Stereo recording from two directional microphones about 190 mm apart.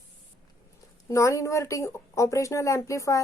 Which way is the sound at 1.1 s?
15° left (ahead or behind).